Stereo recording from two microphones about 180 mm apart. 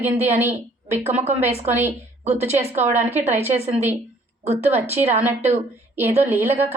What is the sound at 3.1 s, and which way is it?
Speech, 10° right (ahead or behind).